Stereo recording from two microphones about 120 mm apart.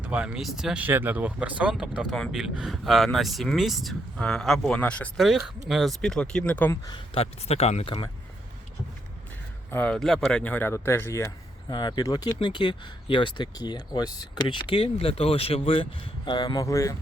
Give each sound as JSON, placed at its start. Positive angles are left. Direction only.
{"t": 0.0, "sound": "speech", "side_deg": -10}
{"t": 0.9, "sound": "speech", "side_deg": -15}
{"t": 5.1, "sound": "speech", "side_deg": 0}
{"t": 6.7, "sound": "speech", "side_deg": 30}
{"t": 7.1, "sound": "speech", "side_deg": 55}
{"t": 9.6, "sound": "a man's voice", "side_deg": 15}
{"t": 9.9, "sound": "speech", "side_deg": 0}
{"t": 11.7, "sound": "speech", "side_deg": 35}
{"t": 14.4, "sound": "speech", "side_deg": 45}